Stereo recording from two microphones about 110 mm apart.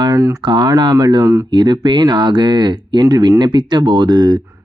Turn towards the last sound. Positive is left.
turn(degrees=-40)  # may be behind; listen again after turning